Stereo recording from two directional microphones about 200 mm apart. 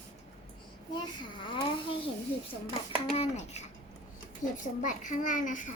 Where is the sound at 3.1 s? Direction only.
30° left (ahead or behind).